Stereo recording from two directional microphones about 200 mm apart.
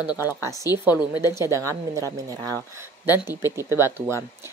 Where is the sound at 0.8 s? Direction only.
10° right (ahead or behind).